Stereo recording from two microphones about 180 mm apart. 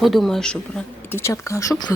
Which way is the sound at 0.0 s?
Centre (ahead or behind).